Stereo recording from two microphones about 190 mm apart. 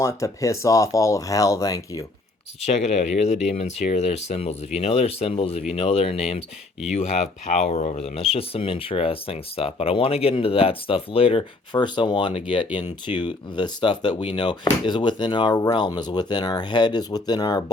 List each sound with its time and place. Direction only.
0.0 s speech: 15° left (ahead or behind)
2.6 s speech: 35° left (ahead or behind)